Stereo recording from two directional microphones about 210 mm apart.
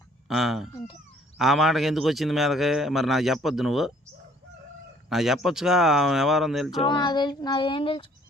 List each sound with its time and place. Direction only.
0.3 s a man's voice: centre (ahead or behind)
5.0 s a man's voice: centre (ahead or behind)
6.8 s child singing: 20° left (ahead or behind)